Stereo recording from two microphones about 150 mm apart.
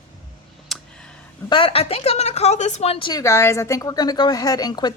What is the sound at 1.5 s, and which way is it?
A woman's voice, 35° left (ahead or behind).